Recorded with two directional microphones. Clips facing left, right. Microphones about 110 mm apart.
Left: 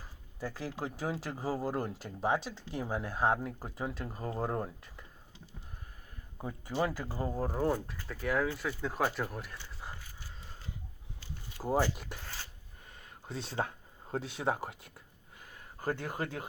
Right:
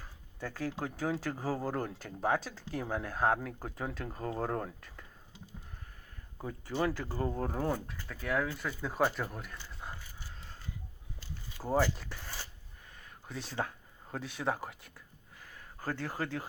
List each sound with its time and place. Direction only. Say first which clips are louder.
0.3 s speech: right 1 dB; 10° left (ahead or behind)
6.4 s speech: even; 20° left (ahead or behind); by 9.9 s centre (ahead or behind)
11.6 s speech: left 2 dB; 5° left (ahead or behind)
13.2 s speech: left 1 dB; 25° left (ahead or behind)